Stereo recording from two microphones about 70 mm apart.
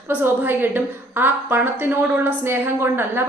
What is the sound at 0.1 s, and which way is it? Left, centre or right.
A woman's voice, right.